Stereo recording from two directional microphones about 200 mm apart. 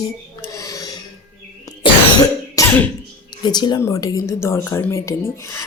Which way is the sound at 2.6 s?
15° left (ahead or behind).